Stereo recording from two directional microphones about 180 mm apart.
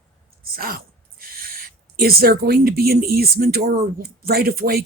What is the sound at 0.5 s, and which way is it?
Speech, 55° right (ahead or behind).